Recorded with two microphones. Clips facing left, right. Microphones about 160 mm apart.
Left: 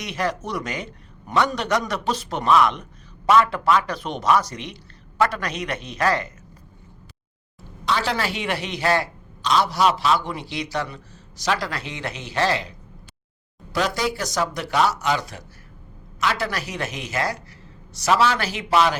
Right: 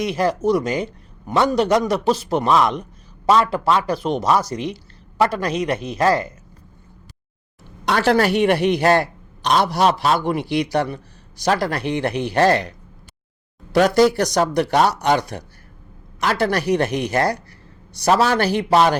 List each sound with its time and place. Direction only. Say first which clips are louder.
0.1 s speech: right 6 dB; 35° right (ahead or behind)
7.9 s a man's voice: right 7 dB; 55° right (ahead or behind)
9.8 s speech: right 2 dB; 45° right (ahead or behind)
10.2 s a man's voice: right 9 dB; 55° right (ahead or behind)
13.7 s speech: right 9 dB; 65° right (ahead or behind)
18.0 s speech: right 3 dB; 45° right (ahead or behind)